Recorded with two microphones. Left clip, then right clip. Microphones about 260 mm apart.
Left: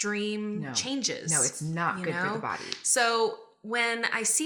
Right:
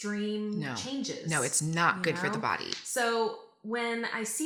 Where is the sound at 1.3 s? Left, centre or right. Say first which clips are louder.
Even; right.